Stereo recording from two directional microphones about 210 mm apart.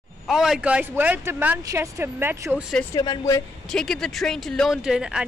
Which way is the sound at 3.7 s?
Centre (ahead or behind).